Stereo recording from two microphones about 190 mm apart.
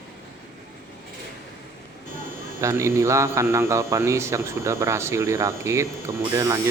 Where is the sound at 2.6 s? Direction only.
15° right (ahead or behind).